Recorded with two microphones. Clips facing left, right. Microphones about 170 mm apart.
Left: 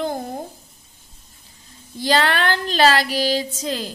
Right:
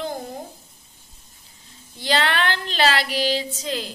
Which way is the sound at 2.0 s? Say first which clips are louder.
Left 3 dB; 40° left (ahead or behind).